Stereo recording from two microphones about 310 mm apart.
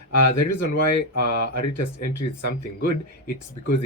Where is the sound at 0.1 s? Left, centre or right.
Left.